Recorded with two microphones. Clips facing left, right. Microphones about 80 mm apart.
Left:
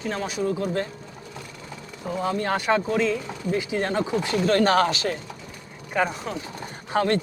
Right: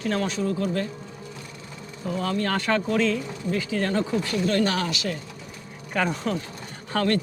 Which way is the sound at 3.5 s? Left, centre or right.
Left.